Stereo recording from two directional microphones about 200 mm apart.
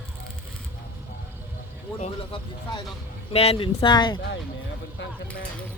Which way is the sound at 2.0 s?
30° left (ahead or behind).